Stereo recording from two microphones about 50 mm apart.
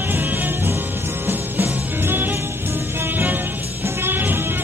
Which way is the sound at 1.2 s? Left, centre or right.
Right.